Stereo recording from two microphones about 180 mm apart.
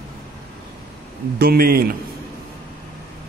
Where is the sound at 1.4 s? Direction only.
55° right (ahead or behind).